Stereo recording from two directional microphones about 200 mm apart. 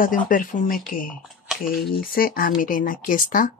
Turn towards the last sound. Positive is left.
turn(degrees=40)  # may be behind; listen again after turning